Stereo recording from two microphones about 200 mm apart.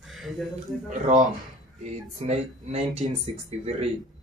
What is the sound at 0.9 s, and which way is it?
Speech, 40° right (ahead or behind).